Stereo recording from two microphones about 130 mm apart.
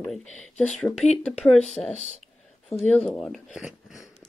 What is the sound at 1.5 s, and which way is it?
Speech, 60° left (ahead or behind).